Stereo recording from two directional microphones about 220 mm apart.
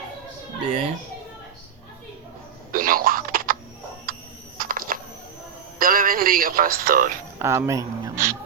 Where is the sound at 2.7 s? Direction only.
40° right (ahead or behind).